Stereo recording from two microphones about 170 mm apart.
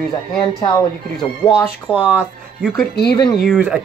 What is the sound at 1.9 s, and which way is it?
Speech, 10° right (ahead or behind).